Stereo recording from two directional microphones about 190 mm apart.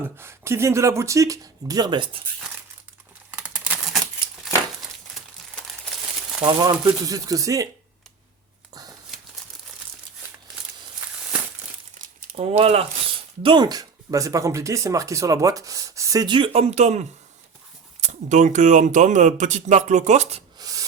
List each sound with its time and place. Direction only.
0.2 s speech: 15° right (ahead or behind)
3.3 s a sound: 5° right (ahead or behind)
4.4 s crumpling: centre (ahead or behind)
6.4 s speech: 20° right (ahead or behind)
12.4 s speech: 30° right (ahead or behind)
20.6 s rub: 20° right (ahead or behind)